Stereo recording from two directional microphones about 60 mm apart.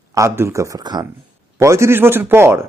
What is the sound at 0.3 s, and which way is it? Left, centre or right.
Speech, right.